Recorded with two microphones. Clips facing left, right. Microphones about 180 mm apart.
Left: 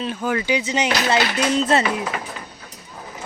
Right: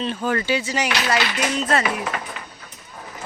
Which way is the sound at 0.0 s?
10° left (ahead or behind).